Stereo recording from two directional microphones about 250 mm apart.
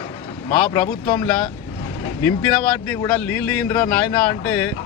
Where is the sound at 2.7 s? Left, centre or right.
Centre.